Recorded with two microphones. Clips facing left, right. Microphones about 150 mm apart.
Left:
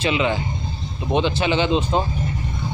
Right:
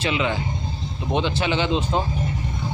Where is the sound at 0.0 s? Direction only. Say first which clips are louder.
Left 3 dB; 20° left (ahead or behind).